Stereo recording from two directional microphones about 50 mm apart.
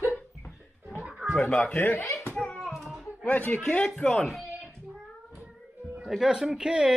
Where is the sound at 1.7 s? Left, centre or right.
Left.